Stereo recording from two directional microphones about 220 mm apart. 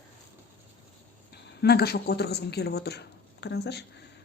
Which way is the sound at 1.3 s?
45° left (ahead or behind).